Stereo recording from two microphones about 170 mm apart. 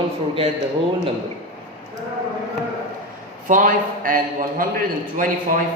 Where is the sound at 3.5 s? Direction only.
50° right (ahead or behind).